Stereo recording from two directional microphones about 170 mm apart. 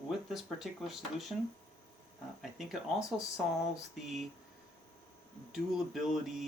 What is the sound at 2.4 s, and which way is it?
Speech, centre (ahead or behind).